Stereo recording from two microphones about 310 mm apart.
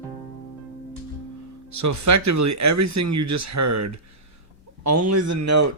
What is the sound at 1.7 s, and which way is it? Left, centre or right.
Speech, right.